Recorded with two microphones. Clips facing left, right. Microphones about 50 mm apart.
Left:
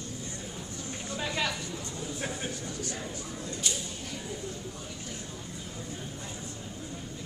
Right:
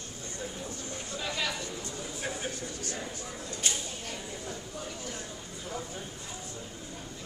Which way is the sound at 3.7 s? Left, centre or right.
Right.